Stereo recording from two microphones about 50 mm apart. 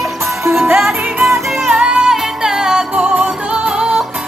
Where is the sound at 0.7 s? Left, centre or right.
Centre.